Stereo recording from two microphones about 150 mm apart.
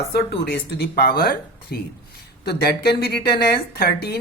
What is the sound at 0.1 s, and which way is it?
A woman's voice, 90° left.